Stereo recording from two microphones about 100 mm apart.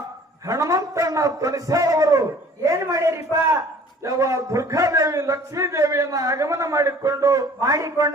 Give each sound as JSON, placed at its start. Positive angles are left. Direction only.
{"t": 0.4, "sound": "a man's voice", "side_deg": -35}